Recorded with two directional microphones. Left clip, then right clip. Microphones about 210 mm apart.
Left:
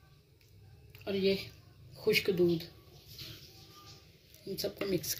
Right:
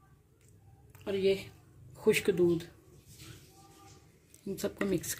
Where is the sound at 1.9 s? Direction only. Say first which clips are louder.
Right 2 dB; 50° right (ahead or behind).